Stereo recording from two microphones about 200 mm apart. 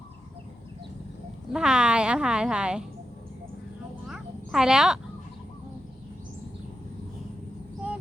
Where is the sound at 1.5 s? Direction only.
5° right (ahead or behind).